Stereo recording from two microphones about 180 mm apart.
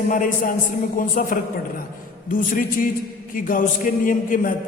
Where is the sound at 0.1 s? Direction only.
50° left (ahead or behind).